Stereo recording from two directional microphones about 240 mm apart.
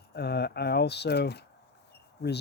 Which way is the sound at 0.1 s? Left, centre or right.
Left.